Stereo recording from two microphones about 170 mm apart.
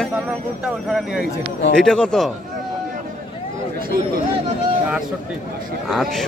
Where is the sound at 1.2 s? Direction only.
75° left (ahead or behind).